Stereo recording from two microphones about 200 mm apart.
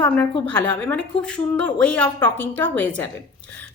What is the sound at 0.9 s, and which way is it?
A woman's voice, 5° left (ahead or behind).